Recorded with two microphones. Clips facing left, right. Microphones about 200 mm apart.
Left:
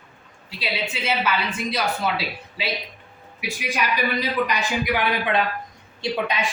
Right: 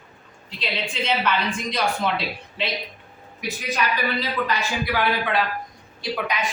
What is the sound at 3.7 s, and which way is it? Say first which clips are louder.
A woman's voice: left 1 dB; 15° left (ahead or behind).